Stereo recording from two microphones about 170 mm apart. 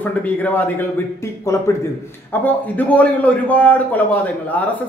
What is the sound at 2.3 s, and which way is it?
Speech, 10° left (ahead or behind).